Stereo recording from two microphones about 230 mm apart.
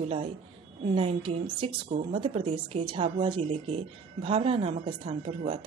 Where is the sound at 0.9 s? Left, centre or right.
Right.